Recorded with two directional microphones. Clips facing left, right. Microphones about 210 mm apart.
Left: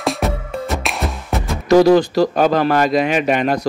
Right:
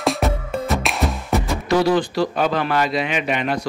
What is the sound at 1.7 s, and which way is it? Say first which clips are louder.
Speech: left 7 dB; 40° left (ahead or behind).